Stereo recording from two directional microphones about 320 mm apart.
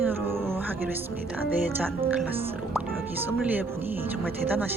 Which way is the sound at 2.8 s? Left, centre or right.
Centre.